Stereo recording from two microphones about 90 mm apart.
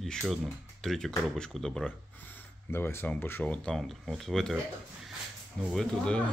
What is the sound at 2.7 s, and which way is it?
Speech, 25° left (ahead or behind).